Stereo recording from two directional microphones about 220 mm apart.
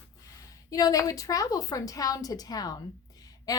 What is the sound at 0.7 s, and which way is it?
A woman's voice, 15° left (ahead or behind).